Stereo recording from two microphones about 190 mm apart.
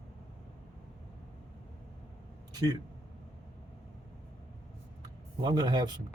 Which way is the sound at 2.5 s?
20° right (ahead or behind).